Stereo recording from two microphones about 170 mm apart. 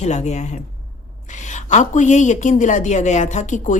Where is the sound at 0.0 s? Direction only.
45° left (ahead or behind).